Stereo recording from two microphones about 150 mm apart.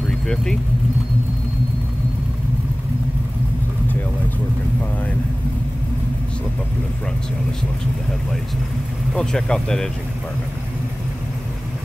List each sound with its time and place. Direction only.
0.3 s speech: 5° left (ahead or behind)
9.1 s speech: 5° left (ahead or behind)